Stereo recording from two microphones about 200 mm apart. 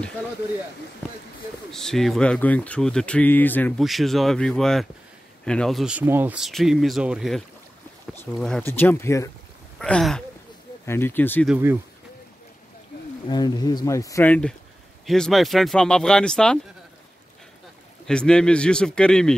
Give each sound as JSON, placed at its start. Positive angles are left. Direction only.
{"t": 1.7, "sound": "speech", "side_deg": 0}
{"t": 9.8, "sound": "speech", "side_deg": 5}
{"t": 11.4, "sound": "speech", "side_deg": -10}
{"t": 13.3, "sound": "speech", "side_deg": 20}
{"t": 18.0, "sound": "speech", "side_deg": 5}